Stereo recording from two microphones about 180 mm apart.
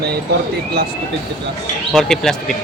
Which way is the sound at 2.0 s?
Centre (ahead or behind).